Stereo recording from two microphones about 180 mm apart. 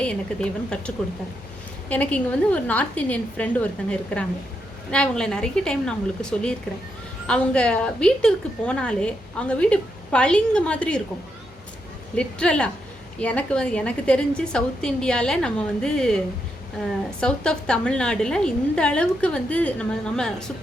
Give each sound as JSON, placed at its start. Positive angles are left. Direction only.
{"t": 0.0, "sound": "a woman's voice", "side_deg": 5}
{"t": 7.3, "sound": "a woman's voice", "side_deg": 5}
{"t": 12.1, "sound": "a woman's voice", "side_deg": 5}